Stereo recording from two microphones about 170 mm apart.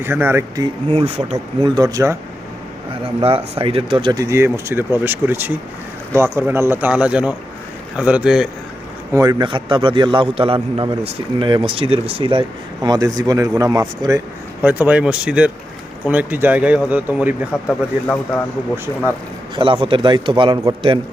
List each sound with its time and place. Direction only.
0.0 s a man's voice: 15° right (ahead or behind)
0.9 s speech: 35° right (ahead or behind)
1.7 s a man's voice: 20° right (ahead or behind)
3.0 s a man's voice: 35° right (ahead or behind); by 8.4 s 5° right (ahead or behind)
9.1 s a man's voice: 20° right (ahead or behind)
14.6 s a man's voice: 10° right (ahead or behind)
17.7 s speech: 10° left (ahead or behind)
19.5 s a man's voice: 30° right (ahead or behind)